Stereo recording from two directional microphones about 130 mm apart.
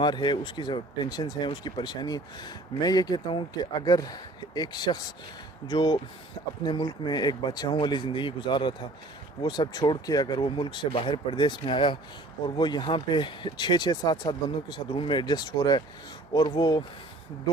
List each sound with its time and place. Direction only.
0.0 s speech: 35° left (ahead or behind)